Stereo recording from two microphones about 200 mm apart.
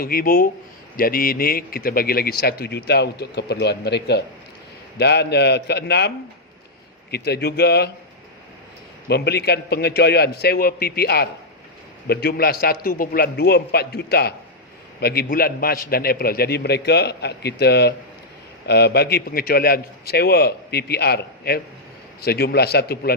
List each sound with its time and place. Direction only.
0.0 s a man's voice: 45° left (ahead or behind)
9.0 s speech: 55° left (ahead or behind)